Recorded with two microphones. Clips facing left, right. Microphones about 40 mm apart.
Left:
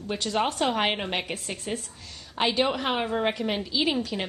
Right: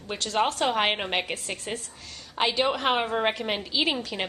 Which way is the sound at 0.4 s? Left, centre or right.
Centre.